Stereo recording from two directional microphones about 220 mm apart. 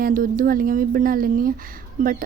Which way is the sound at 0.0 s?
40° right (ahead or behind).